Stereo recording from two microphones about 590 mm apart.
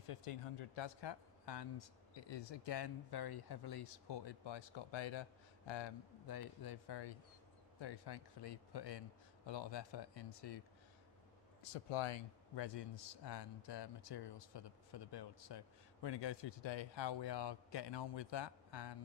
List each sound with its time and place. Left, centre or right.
0.1 s speech: left
11.6 s speech: left